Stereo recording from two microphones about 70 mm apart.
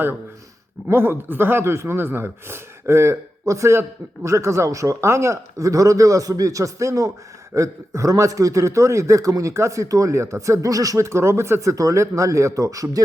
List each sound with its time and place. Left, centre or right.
0.9 s speech: right